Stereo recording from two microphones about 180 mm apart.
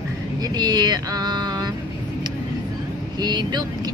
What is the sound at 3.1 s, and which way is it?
Speech, 25° right (ahead or behind).